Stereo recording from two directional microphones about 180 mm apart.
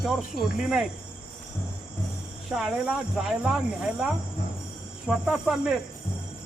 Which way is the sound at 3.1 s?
5° right (ahead or behind).